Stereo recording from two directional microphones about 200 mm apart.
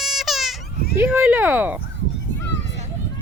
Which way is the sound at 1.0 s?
5° right (ahead or behind).